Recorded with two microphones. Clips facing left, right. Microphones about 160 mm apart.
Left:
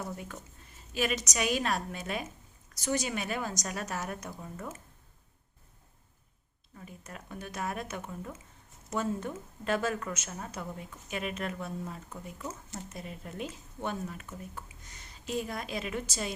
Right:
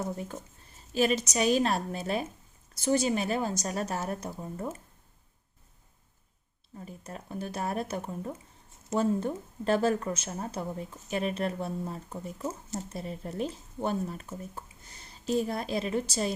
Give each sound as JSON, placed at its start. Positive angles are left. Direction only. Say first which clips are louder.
{"t": 0.0, "sound": "a woman's voice", "louder": "right 5 dB", "side_deg": -30}
{"t": 6.7, "sound": "speech", "louder": "right 4 dB", "side_deg": -30}